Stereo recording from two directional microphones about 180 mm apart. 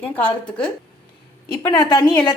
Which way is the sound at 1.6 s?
20° left (ahead or behind).